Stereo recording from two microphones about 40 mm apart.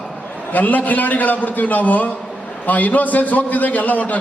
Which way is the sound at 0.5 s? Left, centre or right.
Left.